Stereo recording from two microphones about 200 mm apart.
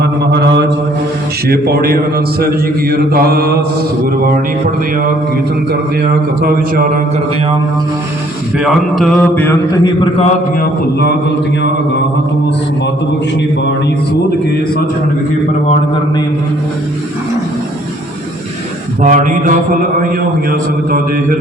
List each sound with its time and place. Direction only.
0.0 s mantra: 55° right (ahead or behind)
1.5 s a man's voice: 50° right (ahead or behind)
6.0 s a man's voice: 50° right (ahead or behind)
8.5 s a man's voice: centre (ahead or behind); by 10.3 s 30° left (ahead or behind)
19.0 s mantra: 40° right (ahead or behind)
20.5 s a man's voice: 45° right (ahead or behind)